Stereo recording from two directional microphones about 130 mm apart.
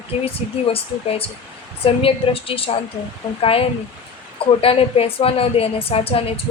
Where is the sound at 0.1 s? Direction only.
55° left (ahead or behind).